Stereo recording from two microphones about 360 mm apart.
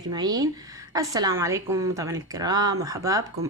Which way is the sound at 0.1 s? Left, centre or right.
Centre.